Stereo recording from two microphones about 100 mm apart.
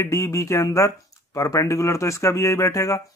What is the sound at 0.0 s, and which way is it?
Speech, 30° left (ahead or behind).